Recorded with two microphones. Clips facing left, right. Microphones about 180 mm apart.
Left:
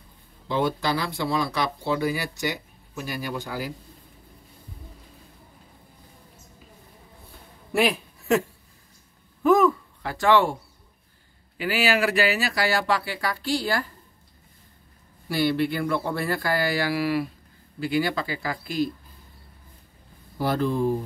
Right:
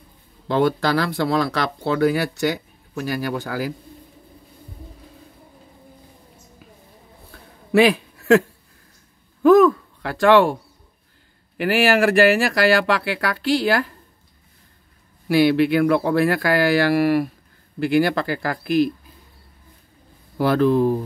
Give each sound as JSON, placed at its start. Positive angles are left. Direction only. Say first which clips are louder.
{"t": 0.5, "sound": "speech", "louder": "right 6 dB", "side_deg": -70}
{"t": 7.7, "sound": "a sound", "louder": "right 7 dB", "side_deg": -65}
{"t": 9.4, "sound": "speech", "louder": "right 6 dB", "side_deg": -65}
{"t": 15.2, "sound": "speech", "louder": "right 7 dB", "side_deg": -75}
{"t": 17.7, "sound": "speech", "louder": "right 6 dB", "side_deg": -60}
{"t": 20.3, "sound": "speech", "louder": "right 7 dB", "side_deg": -75}